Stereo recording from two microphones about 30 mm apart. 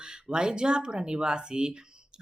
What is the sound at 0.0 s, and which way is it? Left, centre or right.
Speech, right.